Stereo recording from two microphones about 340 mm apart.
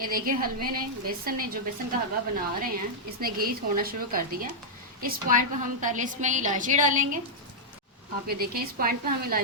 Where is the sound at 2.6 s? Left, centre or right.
Right.